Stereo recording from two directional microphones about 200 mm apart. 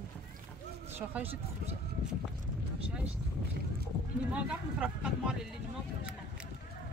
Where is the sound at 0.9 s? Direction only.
10° right (ahead or behind).